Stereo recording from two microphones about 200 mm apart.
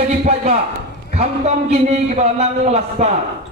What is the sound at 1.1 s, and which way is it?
A man's voice, 30° right (ahead or behind).